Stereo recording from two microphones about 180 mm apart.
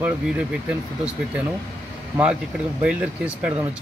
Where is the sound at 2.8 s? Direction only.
5° right (ahead or behind).